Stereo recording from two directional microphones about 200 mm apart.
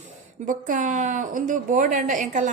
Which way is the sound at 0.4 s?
40° right (ahead or behind).